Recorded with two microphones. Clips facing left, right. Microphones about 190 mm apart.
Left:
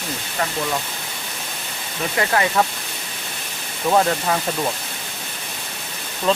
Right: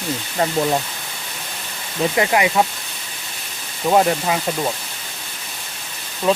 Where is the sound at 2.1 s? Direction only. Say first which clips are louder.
Right 1 dB; 15° right (ahead or behind).